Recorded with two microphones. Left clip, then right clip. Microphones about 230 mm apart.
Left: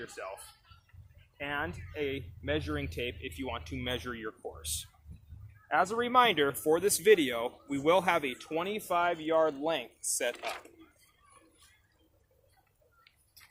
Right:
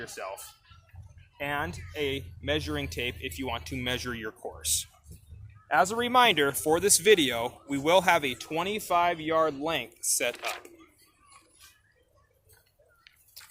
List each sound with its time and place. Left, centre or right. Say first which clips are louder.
0.0 s speech: right 4 dB; right